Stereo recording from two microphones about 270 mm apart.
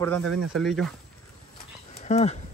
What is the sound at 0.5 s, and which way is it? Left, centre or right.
Speech, centre.